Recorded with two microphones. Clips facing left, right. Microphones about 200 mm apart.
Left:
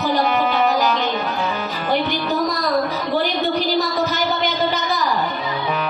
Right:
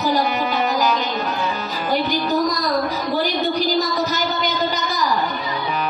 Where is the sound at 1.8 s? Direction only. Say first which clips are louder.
Even; 40° right (ahead or behind).